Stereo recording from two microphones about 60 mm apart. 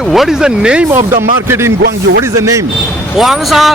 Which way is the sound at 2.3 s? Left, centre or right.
Right.